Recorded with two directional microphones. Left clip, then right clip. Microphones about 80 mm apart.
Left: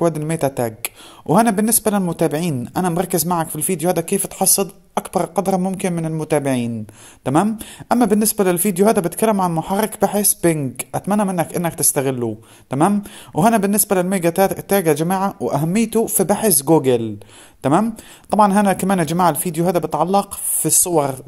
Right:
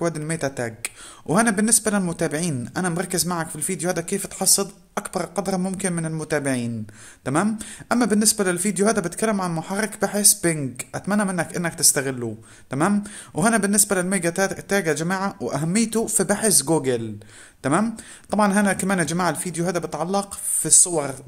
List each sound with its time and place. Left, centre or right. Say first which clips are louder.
0.0 s speech: left 6 dB; left
1.2 s a woman's voice: left 5 dB; left
15.8 s a woman's voice: left 4 dB; centre; by 21.2 s left